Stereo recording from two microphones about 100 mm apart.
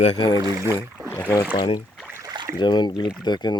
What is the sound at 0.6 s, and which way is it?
Speech, 25° right (ahead or behind).